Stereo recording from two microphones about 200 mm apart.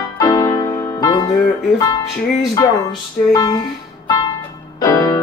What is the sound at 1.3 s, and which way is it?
Speech, 15° left (ahead or behind).